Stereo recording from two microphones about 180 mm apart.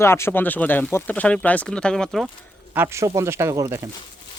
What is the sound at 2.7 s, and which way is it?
Speech, 15° right (ahead or behind).